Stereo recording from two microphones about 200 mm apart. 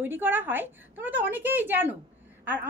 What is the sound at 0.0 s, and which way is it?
A child's voice, 10° right (ahead or behind).